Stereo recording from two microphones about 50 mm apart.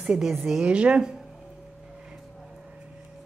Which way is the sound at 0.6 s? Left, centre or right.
Right.